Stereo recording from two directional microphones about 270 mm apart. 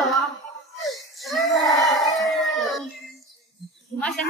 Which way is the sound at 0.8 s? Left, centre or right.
Centre.